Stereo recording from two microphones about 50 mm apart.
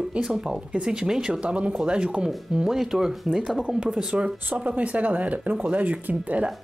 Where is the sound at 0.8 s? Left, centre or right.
Centre.